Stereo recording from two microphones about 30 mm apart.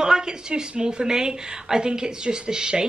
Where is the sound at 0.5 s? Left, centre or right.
Right.